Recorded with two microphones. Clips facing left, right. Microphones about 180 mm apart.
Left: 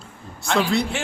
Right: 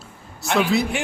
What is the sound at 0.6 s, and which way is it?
Speech, centre (ahead or behind).